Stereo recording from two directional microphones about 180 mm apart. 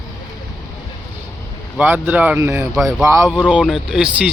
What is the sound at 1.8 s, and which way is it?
Speech, 10° right (ahead or behind).